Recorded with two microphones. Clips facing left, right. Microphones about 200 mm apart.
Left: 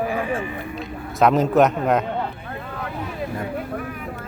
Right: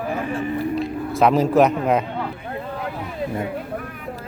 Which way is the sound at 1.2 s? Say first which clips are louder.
Even; centre (ahead or behind).